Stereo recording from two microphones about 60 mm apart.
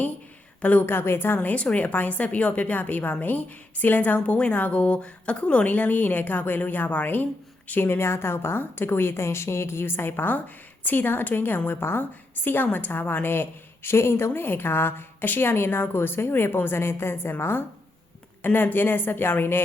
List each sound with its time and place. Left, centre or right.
0.6 s a woman's voice: left